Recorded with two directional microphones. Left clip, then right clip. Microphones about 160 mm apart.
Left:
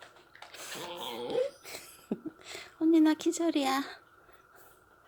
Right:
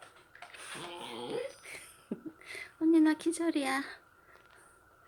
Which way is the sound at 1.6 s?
20° left (ahead or behind).